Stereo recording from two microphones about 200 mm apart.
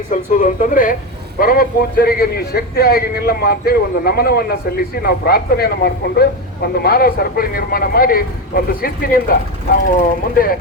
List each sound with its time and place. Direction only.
0.3 s speech: 40° left (ahead or behind)